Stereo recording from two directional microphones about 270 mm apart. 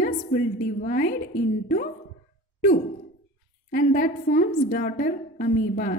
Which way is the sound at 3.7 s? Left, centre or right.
Left.